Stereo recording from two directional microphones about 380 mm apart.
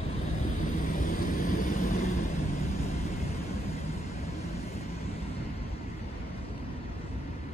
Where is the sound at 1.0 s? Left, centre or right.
Left.